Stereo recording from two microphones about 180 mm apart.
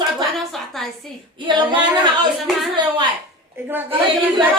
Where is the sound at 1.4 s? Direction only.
25° right (ahead or behind).